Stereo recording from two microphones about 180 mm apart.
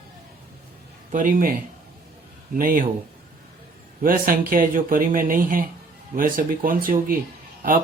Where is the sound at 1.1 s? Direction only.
50° right (ahead or behind).